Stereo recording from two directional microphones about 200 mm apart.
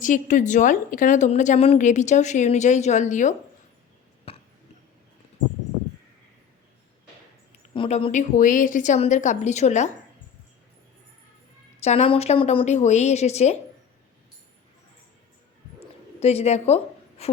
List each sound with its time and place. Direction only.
0.0 s a woman's voice: 40° left (ahead or behind)
4.3 s a sound: 30° left (ahead or behind)
7.7 s a woman's voice: 30° left (ahead or behind)
11.8 s a woman's voice: 35° left (ahead or behind)
16.2 s a woman's voice: 30° left (ahead or behind)